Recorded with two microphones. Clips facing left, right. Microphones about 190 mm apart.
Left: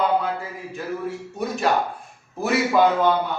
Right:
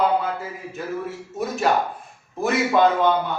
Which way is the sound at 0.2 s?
5° right (ahead or behind).